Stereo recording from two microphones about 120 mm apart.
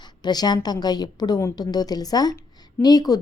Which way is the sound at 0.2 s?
35° left (ahead or behind).